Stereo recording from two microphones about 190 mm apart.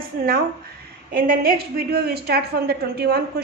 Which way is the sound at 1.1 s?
50° right (ahead or behind).